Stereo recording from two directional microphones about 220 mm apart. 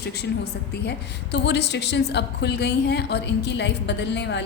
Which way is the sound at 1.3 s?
50° left (ahead or behind).